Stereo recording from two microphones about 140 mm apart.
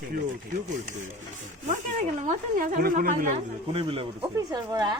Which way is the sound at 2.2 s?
60° right (ahead or behind).